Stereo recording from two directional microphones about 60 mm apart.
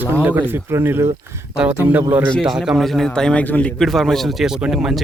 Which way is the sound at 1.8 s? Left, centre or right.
Right.